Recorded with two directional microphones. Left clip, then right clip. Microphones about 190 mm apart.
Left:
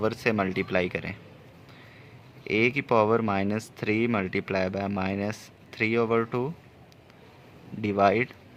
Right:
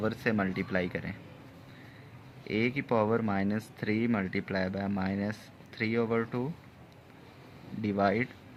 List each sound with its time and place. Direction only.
0.0 s speech: 55° left (ahead or behind)
2.5 s speech: 55° left (ahead or behind)
7.8 s speech: 55° left (ahead or behind)